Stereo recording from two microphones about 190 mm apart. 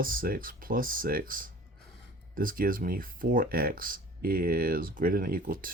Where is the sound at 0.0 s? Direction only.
50° right (ahead or behind).